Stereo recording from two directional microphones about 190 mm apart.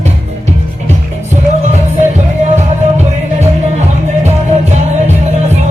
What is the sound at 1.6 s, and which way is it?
Music, 40° right (ahead or behind).